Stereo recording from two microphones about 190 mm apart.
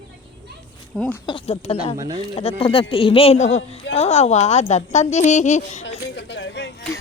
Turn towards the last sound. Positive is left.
turn(degrees=65)  # may be behind; listen again after turning